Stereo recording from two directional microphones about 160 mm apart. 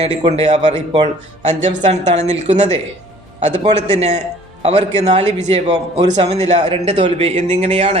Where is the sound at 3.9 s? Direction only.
45° right (ahead or behind).